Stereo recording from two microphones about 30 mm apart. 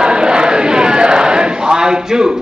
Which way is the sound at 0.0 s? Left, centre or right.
Right.